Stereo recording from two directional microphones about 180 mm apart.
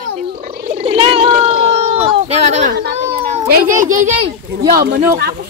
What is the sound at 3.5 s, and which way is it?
A child's voice, 45° right (ahead or behind).